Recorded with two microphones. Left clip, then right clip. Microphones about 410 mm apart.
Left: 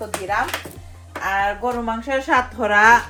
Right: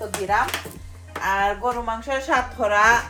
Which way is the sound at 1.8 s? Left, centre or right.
Centre.